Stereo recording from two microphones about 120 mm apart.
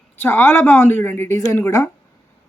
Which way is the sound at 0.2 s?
15° left (ahead or behind).